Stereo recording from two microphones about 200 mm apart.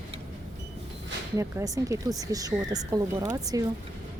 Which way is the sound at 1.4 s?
15° right (ahead or behind).